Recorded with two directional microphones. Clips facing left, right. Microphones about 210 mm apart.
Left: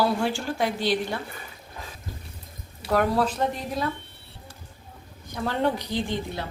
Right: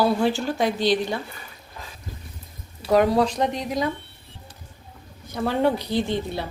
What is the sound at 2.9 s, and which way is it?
Speech, 15° right (ahead or behind).